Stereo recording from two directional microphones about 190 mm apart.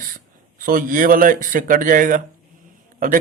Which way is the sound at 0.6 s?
50° right (ahead or behind).